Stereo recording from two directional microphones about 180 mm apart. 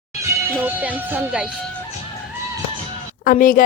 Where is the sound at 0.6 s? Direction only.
10° right (ahead or behind).